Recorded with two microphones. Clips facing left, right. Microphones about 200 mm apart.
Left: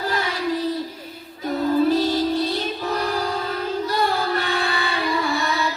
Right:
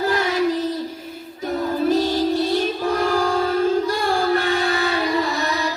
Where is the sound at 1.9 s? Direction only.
45° right (ahead or behind).